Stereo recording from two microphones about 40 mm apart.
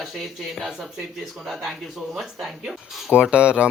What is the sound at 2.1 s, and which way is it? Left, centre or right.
Speech, centre.